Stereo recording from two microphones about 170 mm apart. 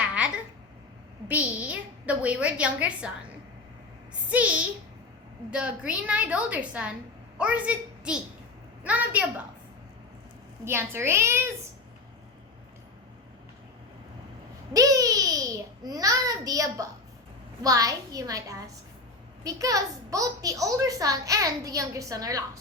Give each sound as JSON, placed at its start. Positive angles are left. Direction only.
{"t": 1.3, "sound": "a woman's voice", "side_deg": -10}
{"t": 4.3, "sound": "a woman's voice", "side_deg": -10}
{"t": 10.7, "sound": "a woman's voice", "side_deg": -15}
{"t": 14.7, "sound": "babbling", "side_deg": -20}
{"t": 17.6, "sound": "a child's voice", "side_deg": -20}